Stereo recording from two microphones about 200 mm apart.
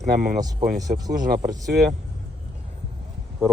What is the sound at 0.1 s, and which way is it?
Speech, 45° right (ahead or behind).